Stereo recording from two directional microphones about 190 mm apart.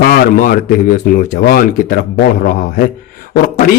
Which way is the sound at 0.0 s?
45° left (ahead or behind).